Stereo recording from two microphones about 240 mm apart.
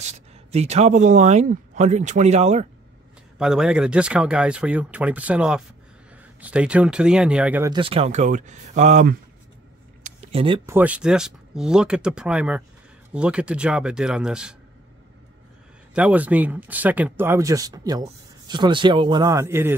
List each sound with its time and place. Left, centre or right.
0.0 s speech: right
3.3 s speech: centre
7.7 s speech: right
10.0 s a sound: right
10.7 s speech: centre
15.9 s speech: centre